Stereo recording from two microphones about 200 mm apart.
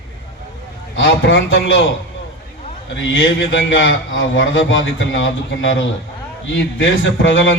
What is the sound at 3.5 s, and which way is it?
A man's voice, 65° left (ahead or behind).